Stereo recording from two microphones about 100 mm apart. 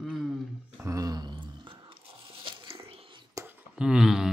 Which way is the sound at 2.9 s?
65° right (ahead or behind).